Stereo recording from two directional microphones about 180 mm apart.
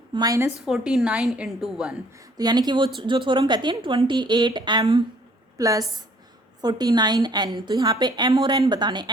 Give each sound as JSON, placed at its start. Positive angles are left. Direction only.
{"t": 0.1, "sound": "a woman's voice", "side_deg": -20}
{"t": 0.6, "sound": "a woman's voice", "side_deg": -5}
{"t": 2.4, "sound": "a woman's voice", "side_deg": -25}